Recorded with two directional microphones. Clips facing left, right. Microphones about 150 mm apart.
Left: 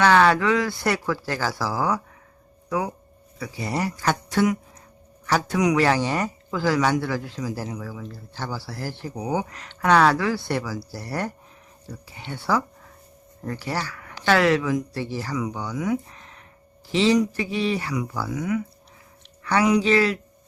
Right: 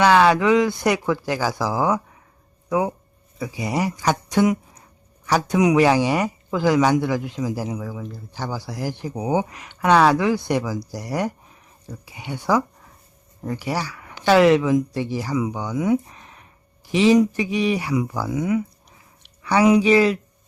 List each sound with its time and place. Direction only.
0.0 s speech: 15° right (ahead or behind)
19.8 s speech: 15° right (ahead or behind)